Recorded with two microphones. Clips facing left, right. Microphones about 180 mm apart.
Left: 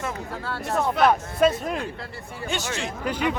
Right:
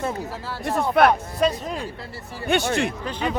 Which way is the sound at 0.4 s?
Centre (ahead or behind).